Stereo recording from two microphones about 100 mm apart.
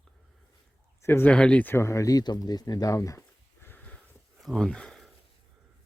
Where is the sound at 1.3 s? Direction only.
10° left (ahead or behind); by 3.2 s 35° left (ahead or behind).